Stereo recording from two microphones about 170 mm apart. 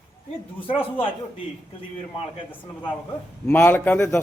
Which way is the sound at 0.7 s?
30° left (ahead or behind).